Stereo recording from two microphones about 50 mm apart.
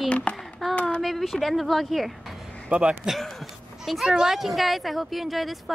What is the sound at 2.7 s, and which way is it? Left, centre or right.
Speech, right.